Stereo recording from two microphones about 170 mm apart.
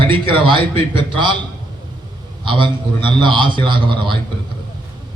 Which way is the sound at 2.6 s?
30° right (ahead or behind).